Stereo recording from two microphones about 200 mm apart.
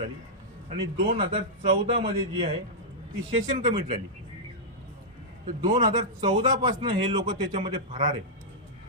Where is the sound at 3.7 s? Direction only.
25° right (ahead or behind).